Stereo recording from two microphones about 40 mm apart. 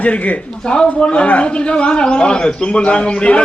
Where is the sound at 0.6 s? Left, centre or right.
Left.